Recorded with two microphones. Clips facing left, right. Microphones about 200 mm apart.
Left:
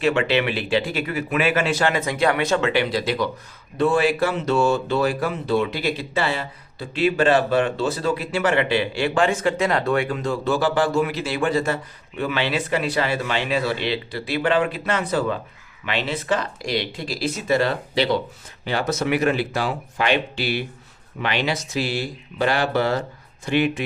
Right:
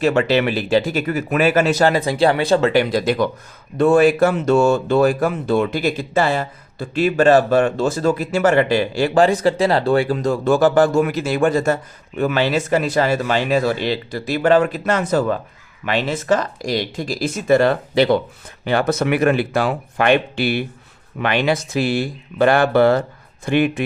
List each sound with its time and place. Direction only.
0.0 s speech: 40° right (ahead or behind)